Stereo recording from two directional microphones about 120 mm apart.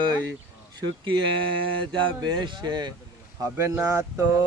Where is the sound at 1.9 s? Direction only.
40° right (ahead or behind).